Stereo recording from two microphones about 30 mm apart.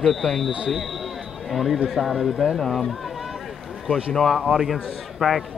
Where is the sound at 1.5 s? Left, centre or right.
Centre.